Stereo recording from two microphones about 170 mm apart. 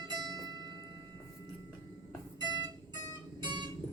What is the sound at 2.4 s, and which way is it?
Music, 25° right (ahead or behind).